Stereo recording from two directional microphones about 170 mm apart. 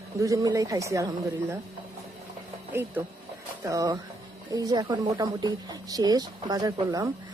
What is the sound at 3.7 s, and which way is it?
Speech, 20° right (ahead or behind).